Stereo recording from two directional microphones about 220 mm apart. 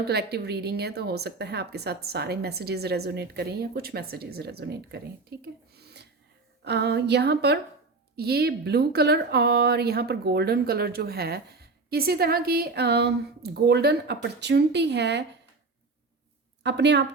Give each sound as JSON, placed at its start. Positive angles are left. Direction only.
{"t": 0.1, "sound": "speech", "side_deg": -45}
{"t": 16.6, "sound": "speech", "side_deg": -50}